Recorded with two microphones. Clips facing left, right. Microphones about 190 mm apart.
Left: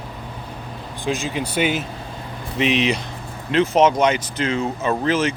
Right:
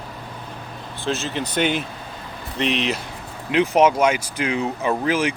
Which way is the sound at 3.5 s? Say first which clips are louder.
Left 1 dB; 15° right (ahead or behind).